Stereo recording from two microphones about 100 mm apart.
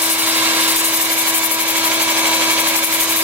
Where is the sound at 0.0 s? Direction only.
15° right (ahead or behind).